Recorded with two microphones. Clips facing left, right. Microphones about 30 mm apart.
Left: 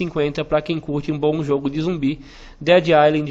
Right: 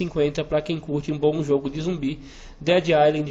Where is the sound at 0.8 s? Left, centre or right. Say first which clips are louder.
Left 3 dB; left.